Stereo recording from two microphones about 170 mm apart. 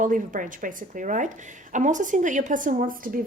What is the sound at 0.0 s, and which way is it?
A woman's voice, 50° right (ahead or behind).